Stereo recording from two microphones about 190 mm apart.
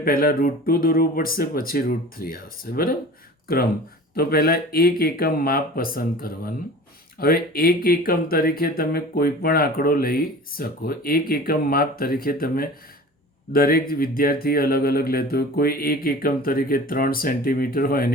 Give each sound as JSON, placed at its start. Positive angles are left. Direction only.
{"t": 0.0, "sound": "speech", "side_deg": 50}
{"t": 4.1, "sound": "speech", "side_deg": 55}